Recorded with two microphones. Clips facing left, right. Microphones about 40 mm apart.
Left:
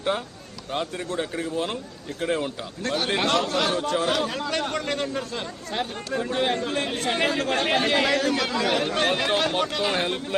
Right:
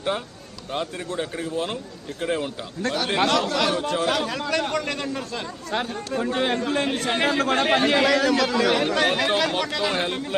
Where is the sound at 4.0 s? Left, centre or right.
Right.